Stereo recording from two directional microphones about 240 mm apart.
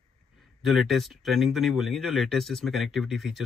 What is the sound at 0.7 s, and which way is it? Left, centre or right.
Speech, centre.